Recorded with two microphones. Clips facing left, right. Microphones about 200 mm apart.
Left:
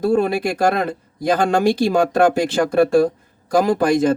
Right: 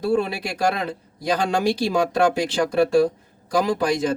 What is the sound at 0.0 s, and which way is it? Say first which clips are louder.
Speech: left 5 dB; 50° left (ahead or behind).